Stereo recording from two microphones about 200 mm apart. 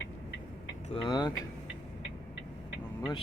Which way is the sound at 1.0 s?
20° left (ahead or behind).